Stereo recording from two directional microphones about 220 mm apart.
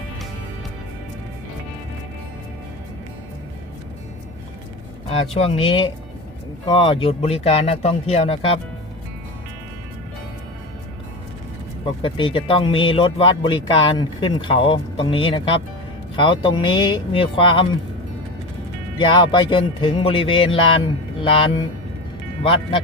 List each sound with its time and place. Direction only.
5.1 s speech: 25° left (ahead or behind)
11.9 s speech: 25° left (ahead or behind)
18.9 s speech: 20° left (ahead or behind)